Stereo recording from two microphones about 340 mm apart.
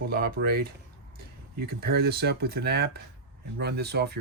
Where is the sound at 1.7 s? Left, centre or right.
Right.